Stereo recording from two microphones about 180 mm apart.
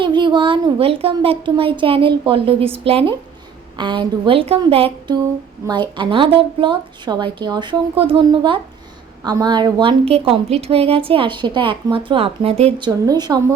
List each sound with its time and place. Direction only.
0.0 s a woman's voice: 25° right (ahead or behind)
13.1 s a woman's voice: 20° right (ahead or behind)